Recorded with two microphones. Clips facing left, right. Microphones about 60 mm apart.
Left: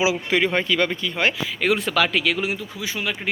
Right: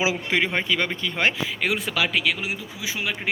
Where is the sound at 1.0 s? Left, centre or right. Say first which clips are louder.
Left 1 dB; right.